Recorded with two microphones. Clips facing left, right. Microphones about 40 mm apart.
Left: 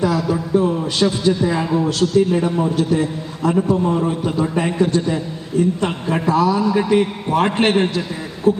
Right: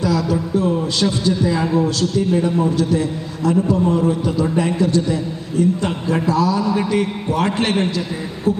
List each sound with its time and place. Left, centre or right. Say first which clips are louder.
0.0 s a sound: even; left
1.2 s a man's voice: left 1 dB; left
1.6 s a man's voice: right 1 dB; centre
1.9 s a man's voice: left 2 dB; left